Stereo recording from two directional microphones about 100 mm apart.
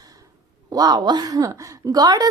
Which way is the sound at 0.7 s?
45° right (ahead or behind).